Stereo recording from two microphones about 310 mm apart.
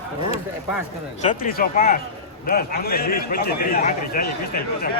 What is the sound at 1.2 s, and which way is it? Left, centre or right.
A man's voice, left.